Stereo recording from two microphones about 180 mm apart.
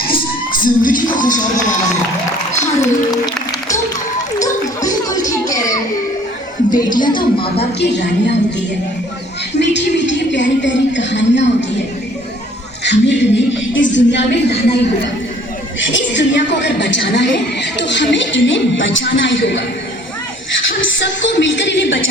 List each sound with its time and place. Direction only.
0.5 s speech: 50° left (ahead or behind)
3.1 s applause: 20° left (ahead or behind)
4.4 s a sound: 20° left (ahead or behind)
6.7 s speech: 25° left (ahead or behind)
7.8 s a woman's voice: 70° left (ahead or behind)
12.8 s a sound: 70° left (ahead or behind)
15.9 s a woman's voice: 90° left
20.7 s speech: 90° left